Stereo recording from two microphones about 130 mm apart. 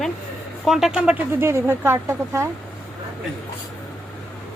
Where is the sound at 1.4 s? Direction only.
20° right (ahead or behind).